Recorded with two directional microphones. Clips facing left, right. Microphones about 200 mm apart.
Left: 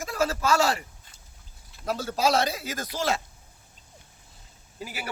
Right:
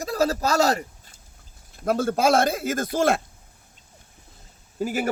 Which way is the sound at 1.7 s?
50° right (ahead or behind).